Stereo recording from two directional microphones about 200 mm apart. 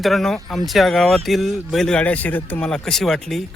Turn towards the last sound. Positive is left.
turn(degrees=0)  # may be behind; listen again after turning